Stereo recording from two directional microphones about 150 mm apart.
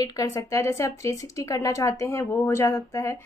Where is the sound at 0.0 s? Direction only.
20° left (ahead or behind).